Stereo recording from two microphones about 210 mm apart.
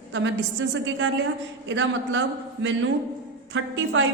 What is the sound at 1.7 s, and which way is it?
Speech, 60° right (ahead or behind).